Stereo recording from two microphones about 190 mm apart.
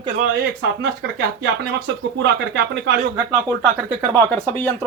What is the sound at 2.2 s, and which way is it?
Speech, 70° right (ahead or behind).